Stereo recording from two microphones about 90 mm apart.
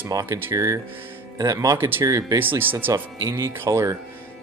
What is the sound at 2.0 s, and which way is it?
Speech, 40° right (ahead or behind).